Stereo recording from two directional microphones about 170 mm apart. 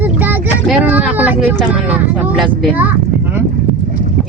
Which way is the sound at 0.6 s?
5° right (ahead or behind).